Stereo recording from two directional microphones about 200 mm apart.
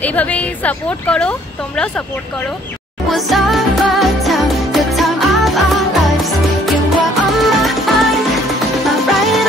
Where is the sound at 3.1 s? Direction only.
Centre (ahead or behind).